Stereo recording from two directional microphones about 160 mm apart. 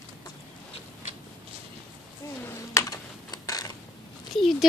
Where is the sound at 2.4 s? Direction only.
20° left (ahead or behind).